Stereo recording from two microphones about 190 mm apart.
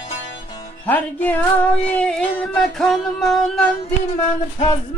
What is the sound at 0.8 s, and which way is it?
Music, 10° left (ahead or behind).